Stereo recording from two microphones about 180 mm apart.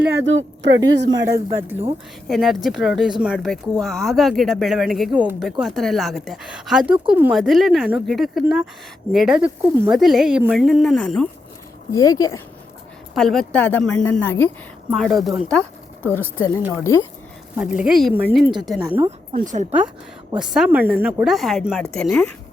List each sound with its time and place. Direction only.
0.1 s speech: 85° right
0.8 s speech: 20° right (ahead or behind)
2.2 s speech: centre (ahead or behind)
11.9 s speech: 20° left (ahead or behind)
13.1 s a woman's voice: centre (ahead or behind)
14.8 s speech: centre (ahead or behind)
16.0 s a woman's voice: 10° left (ahead or behind)
17.6 s speech: 5° right (ahead or behind)
18.7 s speech: centre (ahead or behind)
19.0 s a woman's voice: 45° right (ahead or behind)
20.4 s speech: 5° right (ahead or behind)